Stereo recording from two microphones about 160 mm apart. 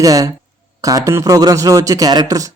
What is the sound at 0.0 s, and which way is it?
A man's voice, 20° right (ahead or behind).